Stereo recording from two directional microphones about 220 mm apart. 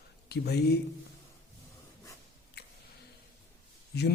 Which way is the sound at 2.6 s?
50° left (ahead or behind).